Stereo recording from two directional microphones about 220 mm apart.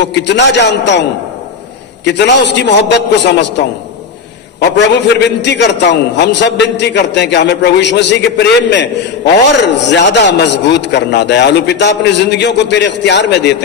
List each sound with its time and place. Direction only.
0.0 s a man's voice: 50° left (ahead or behind)
2.0 s a man's voice: 50° left (ahead or behind)